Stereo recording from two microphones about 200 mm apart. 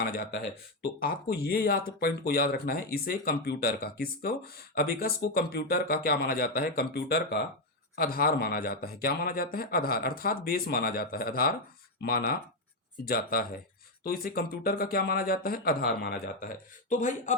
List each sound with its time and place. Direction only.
0.0 s speech: 50° left (ahead or behind)
16.9 s a man's voice: 40° left (ahead or behind)